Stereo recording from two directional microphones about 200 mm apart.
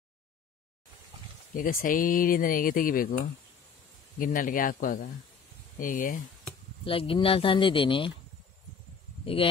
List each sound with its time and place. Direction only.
1.5 s speech: 45° left (ahead or behind)
4.2 s speech: 45° left (ahead or behind)
6.8 s speech: 25° left (ahead or behind)
9.2 s speech: 25° left (ahead or behind)